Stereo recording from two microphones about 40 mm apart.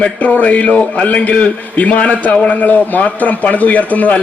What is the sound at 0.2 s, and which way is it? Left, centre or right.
A man's voice, left.